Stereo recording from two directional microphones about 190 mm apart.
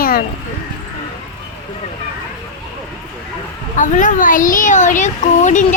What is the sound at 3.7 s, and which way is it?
Speech, 40° left (ahead or behind).